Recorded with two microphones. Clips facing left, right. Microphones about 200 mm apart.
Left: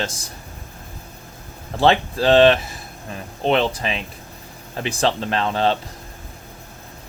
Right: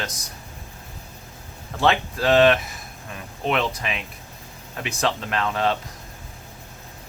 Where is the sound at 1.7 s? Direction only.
30° left (ahead or behind).